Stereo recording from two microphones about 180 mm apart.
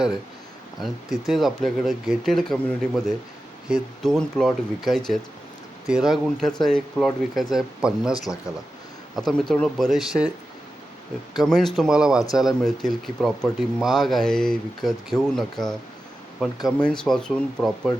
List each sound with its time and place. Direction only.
1.3 s speech: centre (ahead or behind)
9.1 s speech: centre (ahead or behind)
11.3 s speech: centre (ahead or behind)